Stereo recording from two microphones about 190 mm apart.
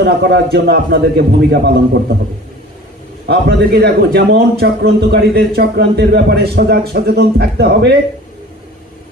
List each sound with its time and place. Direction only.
0.0 s a man's voice: 60° right (ahead or behind)
3.3 s a man's voice: 60° right (ahead or behind)